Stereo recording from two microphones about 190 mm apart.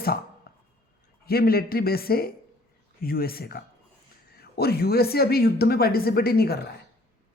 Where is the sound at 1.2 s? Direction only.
55° left (ahead or behind).